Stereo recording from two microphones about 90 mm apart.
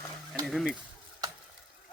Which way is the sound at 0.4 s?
5° right (ahead or behind).